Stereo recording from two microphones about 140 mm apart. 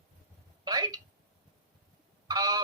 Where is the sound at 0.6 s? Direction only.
30° right (ahead or behind).